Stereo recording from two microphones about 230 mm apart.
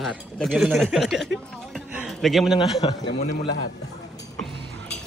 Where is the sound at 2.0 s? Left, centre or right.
Centre.